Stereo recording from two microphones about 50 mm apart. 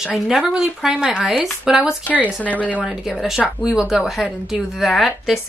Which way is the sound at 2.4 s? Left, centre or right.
Left.